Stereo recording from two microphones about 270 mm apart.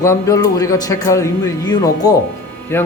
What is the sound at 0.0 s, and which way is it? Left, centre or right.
A man's voice, centre.